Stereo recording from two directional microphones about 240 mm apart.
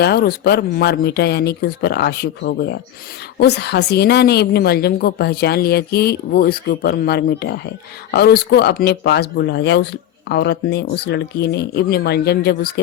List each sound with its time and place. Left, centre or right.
0.0 s a woman's voice: left